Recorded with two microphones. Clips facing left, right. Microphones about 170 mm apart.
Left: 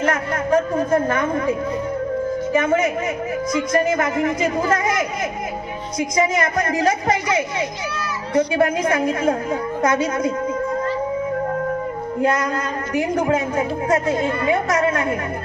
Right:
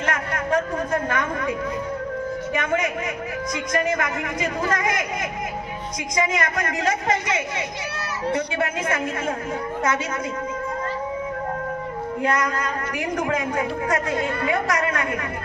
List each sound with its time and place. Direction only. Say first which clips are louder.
0.0 s a woman's voice: left 5 dB; 30° left (ahead or behind)
12.2 s a woman's voice: left 4 dB; 35° left (ahead or behind)